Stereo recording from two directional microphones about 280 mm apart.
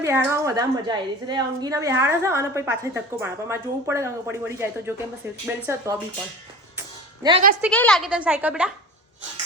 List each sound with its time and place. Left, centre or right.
0.0 s a woman's voice: centre
7.2 s a woman's voice: centre
7.6 s a woman's voice: centre